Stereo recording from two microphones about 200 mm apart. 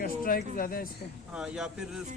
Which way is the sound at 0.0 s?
45° left (ahead or behind).